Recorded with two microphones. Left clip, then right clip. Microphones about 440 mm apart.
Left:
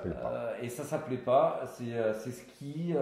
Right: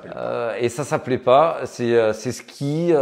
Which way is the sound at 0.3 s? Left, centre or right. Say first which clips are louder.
Right 13 dB; right.